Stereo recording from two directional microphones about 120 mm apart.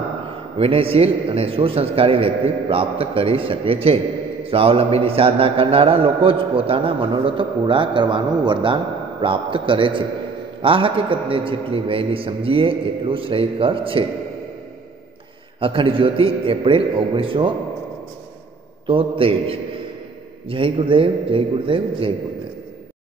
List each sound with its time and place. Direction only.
0.6 s a man's voice: 50° right (ahead or behind)
15.6 s a man's voice: 45° right (ahead or behind)
18.9 s a man's voice: 50° right (ahead or behind)